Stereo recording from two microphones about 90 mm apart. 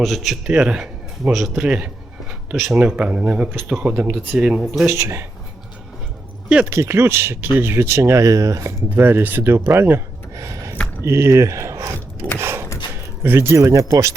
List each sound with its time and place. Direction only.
0.0 s speech: centre (ahead or behind)
0.4 s speech: 10° right (ahead or behind)
4.9 s speech: 30° right (ahead or behind)
6.7 s speech: 30° right (ahead or behind)
8.9 s speech: 25° right (ahead or behind)
10.3 s a sound: 35° right (ahead or behind)
11.0 s speech: 30° right (ahead or behind)
12.4 s a sound: 25° right (ahead or behind)
13.2 s speech: 25° right (ahead or behind)